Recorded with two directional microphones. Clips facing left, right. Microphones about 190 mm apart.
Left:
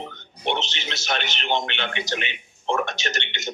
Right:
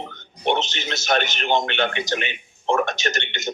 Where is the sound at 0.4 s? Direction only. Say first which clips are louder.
Right 4 dB; 45° right (ahead or behind).